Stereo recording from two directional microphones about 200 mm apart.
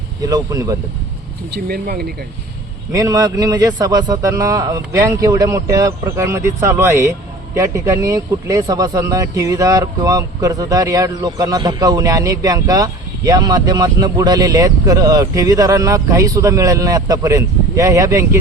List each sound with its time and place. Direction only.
0.2 s a man's voice: 20° right (ahead or behind)
1.5 s speech: 50° right (ahead or behind)
2.9 s a man's voice: 20° right (ahead or behind)